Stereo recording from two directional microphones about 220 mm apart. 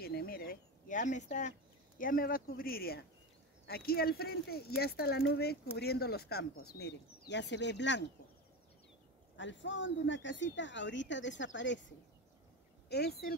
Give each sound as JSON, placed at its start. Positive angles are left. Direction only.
{"t": 0.0, "sound": "a sound", "side_deg": 45}
{"t": 2.0, "sound": "speech", "side_deg": 40}
{"t": 6.5, "sound": "speech", "side_deg": 85}
{"t": 6.8, "sound": "speech", "side_deg": 50}
{"t": 9.4, "sound": "speech", "side_deg": 55}
{"t": 12.9, "sound": "speech", "side_deg": 45}